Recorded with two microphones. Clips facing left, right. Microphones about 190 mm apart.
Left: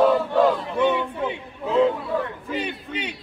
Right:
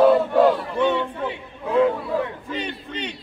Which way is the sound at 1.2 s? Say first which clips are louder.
Left 1 dB; 25° left (ahead or behind).